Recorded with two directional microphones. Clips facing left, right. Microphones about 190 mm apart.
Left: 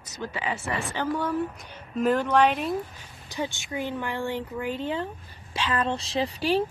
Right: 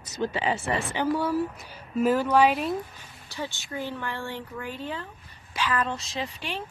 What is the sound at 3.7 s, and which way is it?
A woman's voice, 15° left (ahead or behind).